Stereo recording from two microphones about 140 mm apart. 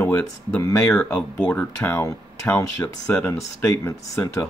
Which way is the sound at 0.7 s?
5° left (ahead or behind).